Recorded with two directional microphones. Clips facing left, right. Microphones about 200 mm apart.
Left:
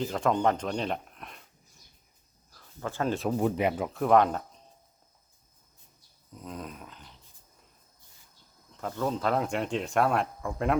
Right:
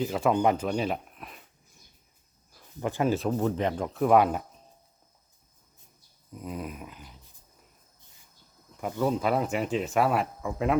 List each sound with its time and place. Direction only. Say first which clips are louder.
0.0 s speech: right 2 dB; 5° right (ahead or behind)
2.5 s a sound: right 5 dB; 15° right (ahead or behind)
3.2 s speech: even; 10° left (ahead or behind); by 4.6 s 10° right (ahead or behind)
6.3 s dog: right 4 dB; 10° right (ahead or behind)
8.7 s speech: right 3 dB; 10° right (ahead or behind)